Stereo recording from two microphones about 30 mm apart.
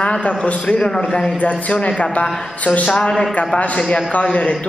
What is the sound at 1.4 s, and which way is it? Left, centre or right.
Speech, left.